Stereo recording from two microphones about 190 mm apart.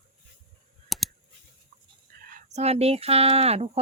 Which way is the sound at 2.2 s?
40° right (ahead or behind).